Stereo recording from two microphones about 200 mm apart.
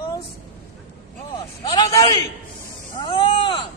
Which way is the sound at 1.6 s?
20° left (ahead or behind).